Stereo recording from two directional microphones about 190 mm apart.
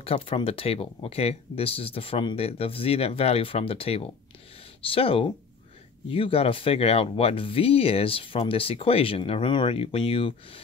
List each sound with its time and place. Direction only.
0.0 s speech: 30° left (ahead or behind)